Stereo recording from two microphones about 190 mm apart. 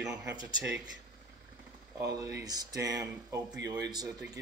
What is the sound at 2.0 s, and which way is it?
Speech, 20° right (ahead or behind).